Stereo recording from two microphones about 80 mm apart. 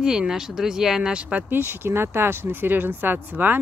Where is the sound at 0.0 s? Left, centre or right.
Centre.